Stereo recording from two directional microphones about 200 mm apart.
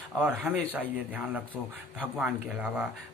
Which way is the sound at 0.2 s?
Centre (ahead or behind).